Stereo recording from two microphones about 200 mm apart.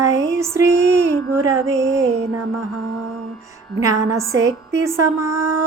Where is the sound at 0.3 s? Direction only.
15° right (ahead or behind).